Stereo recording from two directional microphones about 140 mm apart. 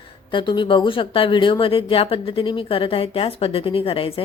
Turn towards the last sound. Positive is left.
turn(degrees=40)  # may be behind; listen again after turning